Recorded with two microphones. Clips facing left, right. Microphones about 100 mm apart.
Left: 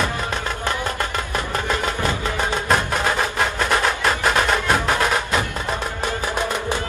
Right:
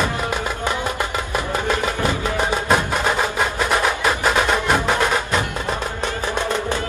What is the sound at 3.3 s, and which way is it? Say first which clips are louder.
Music: right 1 dB; 5° right (ahead or behind).